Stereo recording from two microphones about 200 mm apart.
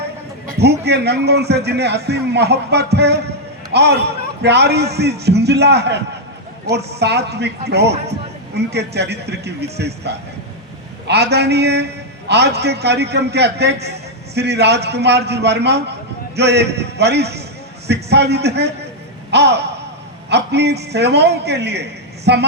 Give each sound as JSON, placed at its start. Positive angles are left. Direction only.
{"t": 0.6, "sound": "a man's voice", "side_deg": -55}